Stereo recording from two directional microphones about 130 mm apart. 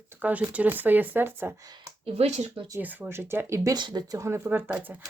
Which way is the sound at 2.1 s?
55° right (ahead or behind).